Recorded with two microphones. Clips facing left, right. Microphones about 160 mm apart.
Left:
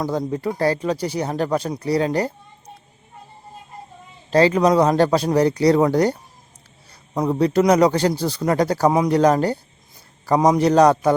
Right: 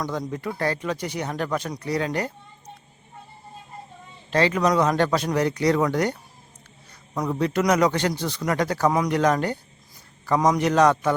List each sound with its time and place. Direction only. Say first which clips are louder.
0.0 s speech: left 6 dB; 30° left (ahead or behind)
4.3 s speech: left 5 dB; 35° left (ahead or behind)